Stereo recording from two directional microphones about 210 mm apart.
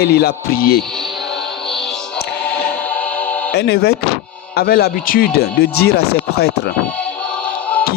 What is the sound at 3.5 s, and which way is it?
Speech, 50° left (ahead or behind).